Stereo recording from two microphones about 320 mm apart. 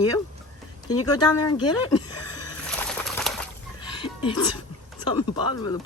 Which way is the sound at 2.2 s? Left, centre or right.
Left.